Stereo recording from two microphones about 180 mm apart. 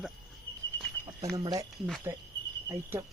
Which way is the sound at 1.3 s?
20° right (ahead or behind).